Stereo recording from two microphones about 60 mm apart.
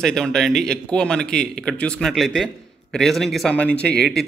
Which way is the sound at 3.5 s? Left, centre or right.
Left.